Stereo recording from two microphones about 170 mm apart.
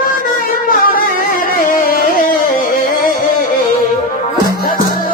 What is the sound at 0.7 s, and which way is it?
Music, 55° left (ahead or behind).